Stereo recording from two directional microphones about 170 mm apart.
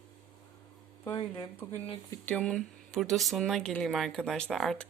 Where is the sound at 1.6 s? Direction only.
15° left (ahead or behind).